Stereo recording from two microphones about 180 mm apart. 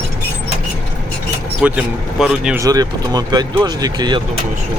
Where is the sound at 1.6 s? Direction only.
5° right (ahead or behind).